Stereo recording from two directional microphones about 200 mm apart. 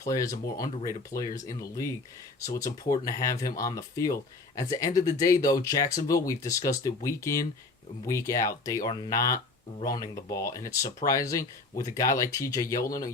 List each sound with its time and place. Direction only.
0.0 s speech: 15° left (ahead or behind)
2.6 s speech: 15° left (ahead or behind)